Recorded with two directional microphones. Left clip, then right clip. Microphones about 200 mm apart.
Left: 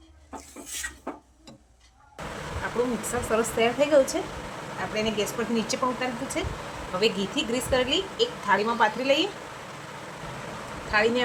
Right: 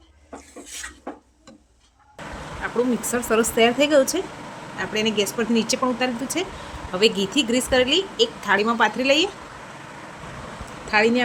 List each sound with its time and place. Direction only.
2.6 s a sound: 40° right (ahead or behind)
3.1 s a woman's voice: 50° right (ahead or behind)
10.9 s speech: 40° right (ahead or behind)